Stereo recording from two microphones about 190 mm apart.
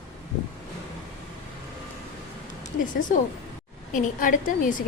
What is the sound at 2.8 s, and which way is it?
A woman's voice, 45° left (ahead or behind).